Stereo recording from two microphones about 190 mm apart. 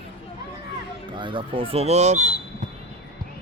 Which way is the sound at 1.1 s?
25° right (ahead or behind).